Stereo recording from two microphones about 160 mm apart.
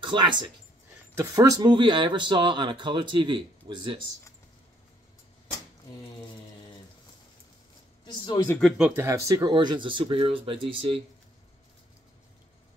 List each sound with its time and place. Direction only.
0.0 s speech: 30° right (ahead or behind)
8.0 s speech: 25° left (ahead or behind)
8.5 s speech: centre (ahead or behind)
9.0 s speech: 20° right (ahead or behind); by 11.0 s 35° right (ahead or behind)